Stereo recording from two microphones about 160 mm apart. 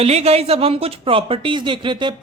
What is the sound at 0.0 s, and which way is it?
A woman's voice, 40° right (ahead or behind).